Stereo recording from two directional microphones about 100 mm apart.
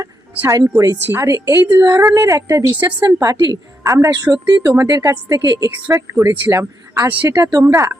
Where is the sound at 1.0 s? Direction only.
25° right (ahead or behind).